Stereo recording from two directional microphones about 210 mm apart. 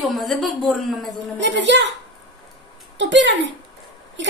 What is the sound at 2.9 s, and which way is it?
Speech, 60° right (ahead or behind).